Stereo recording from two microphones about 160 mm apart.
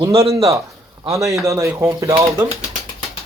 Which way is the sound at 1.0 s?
20° right (ahead or behind).